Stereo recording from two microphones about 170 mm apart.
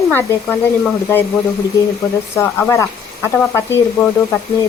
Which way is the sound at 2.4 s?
15° left (ahead or behind).